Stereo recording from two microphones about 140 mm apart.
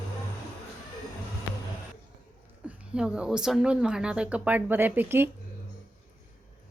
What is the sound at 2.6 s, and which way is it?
Speech, 5° right (ahead or behind).